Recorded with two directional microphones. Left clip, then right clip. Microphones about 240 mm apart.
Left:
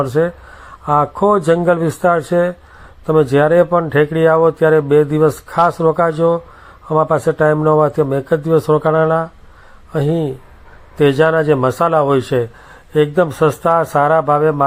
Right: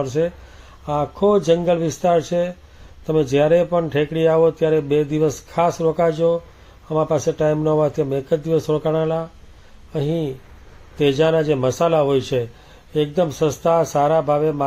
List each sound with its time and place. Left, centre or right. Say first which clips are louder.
0.0 s a man's voice: left 5 dB; centre